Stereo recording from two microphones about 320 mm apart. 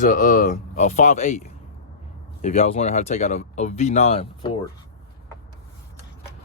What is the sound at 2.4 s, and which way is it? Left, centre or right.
Speech, centre.